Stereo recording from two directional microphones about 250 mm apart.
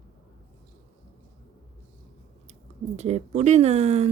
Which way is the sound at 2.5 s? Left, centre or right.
Right.